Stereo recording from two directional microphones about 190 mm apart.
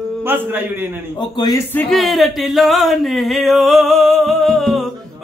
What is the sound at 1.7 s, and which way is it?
Singing, centre (ahead or behind).